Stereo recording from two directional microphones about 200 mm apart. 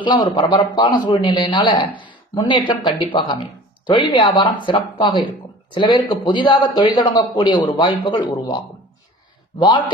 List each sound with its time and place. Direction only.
0.0 s speech: 25° left (ahead or behind)